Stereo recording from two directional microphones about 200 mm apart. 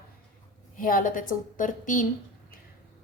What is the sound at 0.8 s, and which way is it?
A woman's voice, 45° left (ahead or behind).